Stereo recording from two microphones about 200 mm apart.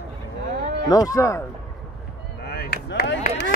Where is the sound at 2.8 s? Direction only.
60° left (ahead or behind).